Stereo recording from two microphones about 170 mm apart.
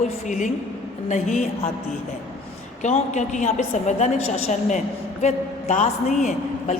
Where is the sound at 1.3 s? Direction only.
40° left (ahead or behind).